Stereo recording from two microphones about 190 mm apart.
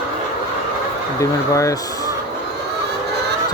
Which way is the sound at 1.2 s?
15° left (ahead or behind).